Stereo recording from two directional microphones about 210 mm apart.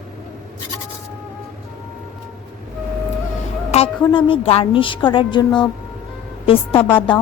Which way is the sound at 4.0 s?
20° left (ahead or behind).